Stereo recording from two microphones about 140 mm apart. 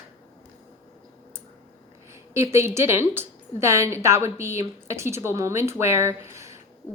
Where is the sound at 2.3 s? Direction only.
20° right (ahead or behind).